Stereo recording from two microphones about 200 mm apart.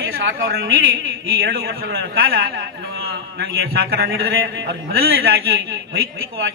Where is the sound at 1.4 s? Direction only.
50° right (ahead or behind).